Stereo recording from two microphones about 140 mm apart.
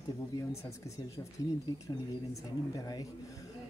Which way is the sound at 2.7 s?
25° left (ahead or behind).